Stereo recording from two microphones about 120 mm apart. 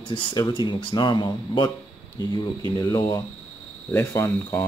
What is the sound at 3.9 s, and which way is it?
Speech, 20° left (ahead or behind).